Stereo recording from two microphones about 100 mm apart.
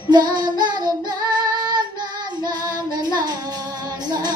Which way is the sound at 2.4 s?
45° right (ahead or behind).